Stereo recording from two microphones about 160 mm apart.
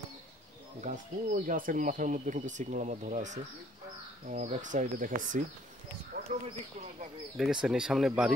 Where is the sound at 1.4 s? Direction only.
60° right (ahead or behind).